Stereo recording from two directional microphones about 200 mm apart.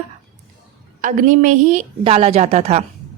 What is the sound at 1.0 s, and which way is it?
A woman's voice, 40° right (ahead or behind).